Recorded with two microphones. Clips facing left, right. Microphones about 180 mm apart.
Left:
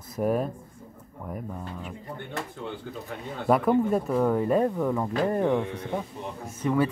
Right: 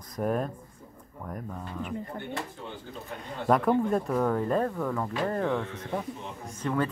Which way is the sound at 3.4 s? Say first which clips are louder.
Left 2 dB; 5° left (ahead or behind).